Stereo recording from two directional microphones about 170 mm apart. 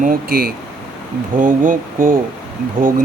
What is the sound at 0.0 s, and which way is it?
Speech, 55° right (ahead or behind).